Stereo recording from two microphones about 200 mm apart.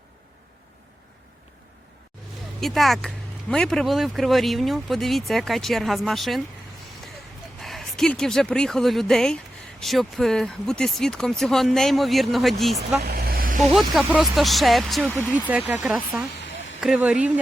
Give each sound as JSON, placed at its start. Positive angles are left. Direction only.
{"t": 2.6, "sound": "speech", "side_deg": 0}
{"t": 7.6, "sound": "speech", "side_deg": 0}
{"t": 13.1, "sound": "vehicle", "side_deg": -50}
{"t": 13.7, "sound": "speech", "side_deg": 0}